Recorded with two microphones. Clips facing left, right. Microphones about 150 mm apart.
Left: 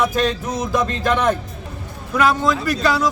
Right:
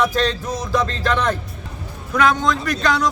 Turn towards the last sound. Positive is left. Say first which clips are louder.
# left 1 dB
turn(degrees=5)  # may be behind; listen again after turning